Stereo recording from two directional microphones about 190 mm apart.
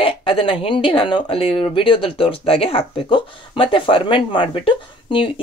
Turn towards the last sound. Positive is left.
turn(degrees=25)  # may be behind; listen again after turning